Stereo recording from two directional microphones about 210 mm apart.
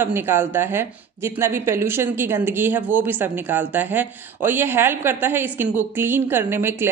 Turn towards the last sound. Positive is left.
turn(degrees=-10)  # may be behind; listen again after turning